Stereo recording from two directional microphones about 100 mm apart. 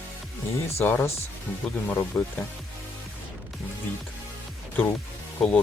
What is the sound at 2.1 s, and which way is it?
Speech, 20° left (ahead or behind).